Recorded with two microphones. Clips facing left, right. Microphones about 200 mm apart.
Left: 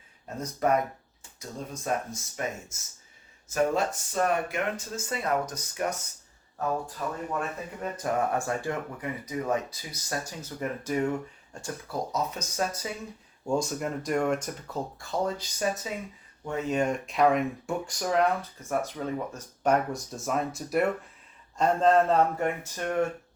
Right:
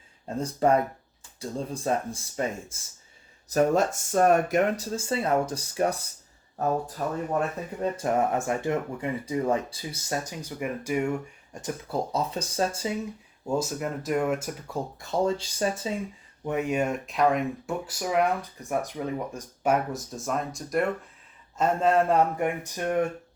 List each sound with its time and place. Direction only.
0.3 s speech: 30° right (ahead or behind)
3.5 s speech: 45° right (ahead or behind)
7.8 s speech: 25° right (ahead or behind)
10.4 s speech: 10° right (ahead or behind)
12.1 s speech: 30° right (ahead or behind)
13.4 s speech: 5° right (ahead or behind)
14.9 s speech: 25° right (ahead or behind)
16.5 s speech: 15° right (ahead or behind); by 20.8 s 5° left (ahead or behind)
21.6 s speech: 10° right (ahead or behind)